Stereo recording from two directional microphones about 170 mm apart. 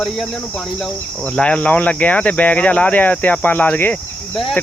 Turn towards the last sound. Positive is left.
turn(degrees=10)  # may be behind; listen again after turning